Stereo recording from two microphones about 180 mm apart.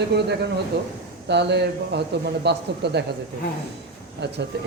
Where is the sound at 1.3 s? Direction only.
70° right (ahead or behind).